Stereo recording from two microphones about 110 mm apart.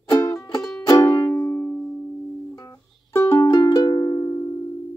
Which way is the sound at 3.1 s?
20° left (ahead or behind).